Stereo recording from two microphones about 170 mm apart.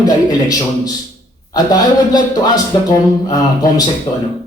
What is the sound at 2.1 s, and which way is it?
Speech, 20° left (ahead or behind).